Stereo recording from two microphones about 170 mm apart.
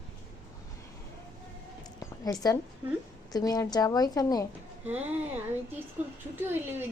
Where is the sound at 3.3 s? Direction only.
20° left (ahead or behind).